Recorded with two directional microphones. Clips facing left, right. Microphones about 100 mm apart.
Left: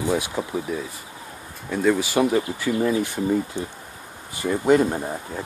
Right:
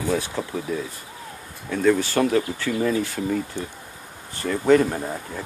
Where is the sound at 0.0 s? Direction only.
15° left (ahead or behind).